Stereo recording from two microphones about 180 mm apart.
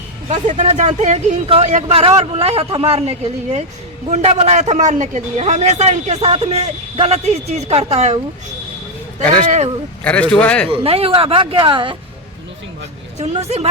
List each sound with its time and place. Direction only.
0.3 s a man's voice: 40° right (ahead or behind)
10.0 s a man's voice: 5° left (ahead or behind)
10.7 s speech: 30° right (ahead or behind)
13.1 s a man's voice: 40° right (ahead or behind)